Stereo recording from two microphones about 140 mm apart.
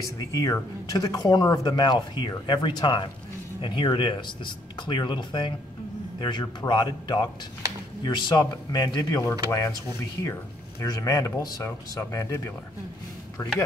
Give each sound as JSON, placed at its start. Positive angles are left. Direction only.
{"t": 0.2, "sound": "a man's voice", "side_deg": 25}
{"t": 10.8, "sound": "speech", "side_deg": 25}